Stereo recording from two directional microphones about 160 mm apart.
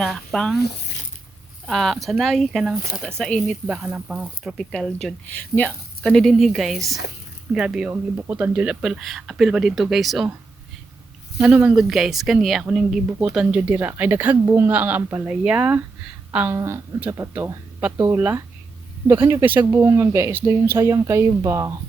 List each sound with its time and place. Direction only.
0.0 s speech: centre (ahead or behind)
1.6 s speech: centre (ahead or behind)
3.7 s speech: 5° right (ahead or behind)
11.3 s speech: 5° right (ahead or behind)